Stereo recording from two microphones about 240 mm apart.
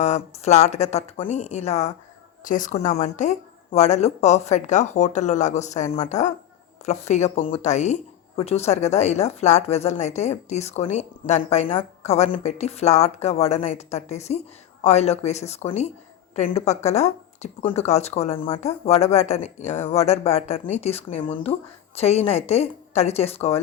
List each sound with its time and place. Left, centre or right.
0.0 s speech: left